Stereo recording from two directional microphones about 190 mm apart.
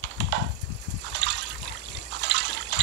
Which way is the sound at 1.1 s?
70° right (ahead or behind).